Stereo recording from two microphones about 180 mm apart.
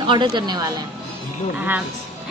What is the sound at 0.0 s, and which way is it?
Speech, 25° right (ahead or behind).